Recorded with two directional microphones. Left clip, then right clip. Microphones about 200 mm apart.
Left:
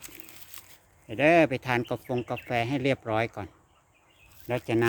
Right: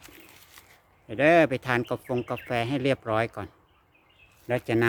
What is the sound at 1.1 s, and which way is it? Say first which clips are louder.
Speech: right 1 dB; centre (ahead or behind).